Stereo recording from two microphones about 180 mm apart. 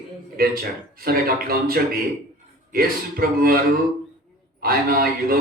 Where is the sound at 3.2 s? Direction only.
55° right (ahead or behind).